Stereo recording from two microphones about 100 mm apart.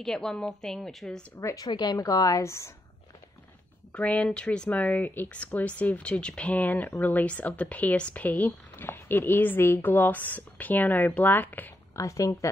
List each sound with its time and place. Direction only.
0.0 s a woman's voice: 5° left (ahead or behind)
1.4 s a woman's voice: 35° left (ahead or behind)
1.7 s a woman's voice: 45° left (ahead or behind)
3.9 s speech: 10° left (ahead or behind)
11.9 s a woman's voice: 30° left (ahead or behind)